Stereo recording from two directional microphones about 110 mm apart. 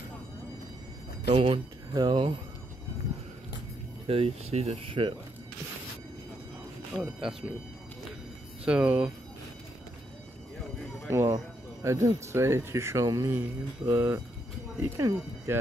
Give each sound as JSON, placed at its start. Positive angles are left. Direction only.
{"t": 1.3, "sound": "speech", "side_deg": -60}
{"t": 2.0, "sound": "speech", "side_deg": -45}
{"t": 4.1, "sound": "speech", "side_deg": -65}
{"t": 6.9, "sound": "speech", "side_deg": -5}
{"t": 8.6, "sound": "speech", "side_deg": -10}
{"t": 11.1, "sound": "speech", "side_deg": -25}